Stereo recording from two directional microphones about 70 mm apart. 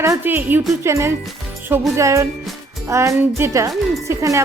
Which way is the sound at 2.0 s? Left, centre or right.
Right.